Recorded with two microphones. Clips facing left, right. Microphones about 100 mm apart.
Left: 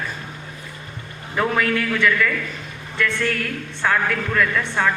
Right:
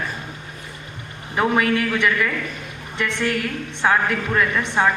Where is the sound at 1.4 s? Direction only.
20° right (ahead or behind).